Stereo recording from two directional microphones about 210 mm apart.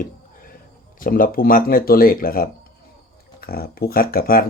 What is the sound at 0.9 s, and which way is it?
Speech, 40° left (ahead or behind).